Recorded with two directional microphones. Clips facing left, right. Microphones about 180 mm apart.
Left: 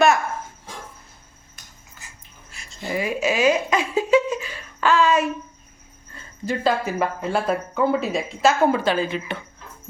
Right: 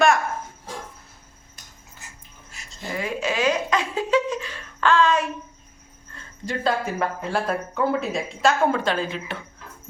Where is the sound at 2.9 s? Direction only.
10° left (ahead or behind).